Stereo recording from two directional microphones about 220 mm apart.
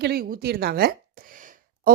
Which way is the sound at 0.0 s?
45° right (ahead or behind).